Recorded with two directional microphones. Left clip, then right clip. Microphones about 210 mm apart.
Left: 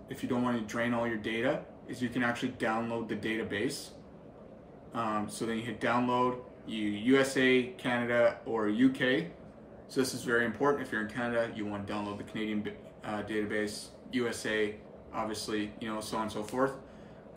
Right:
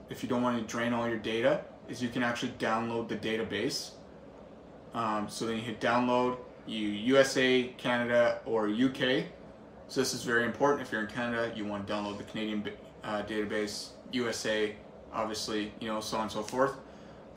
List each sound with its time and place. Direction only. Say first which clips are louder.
0.1 s speech: right 2 dB; 15° right (ahead or behind)
4.9 s speech: right 1 dB; 15° right (ahead or behind)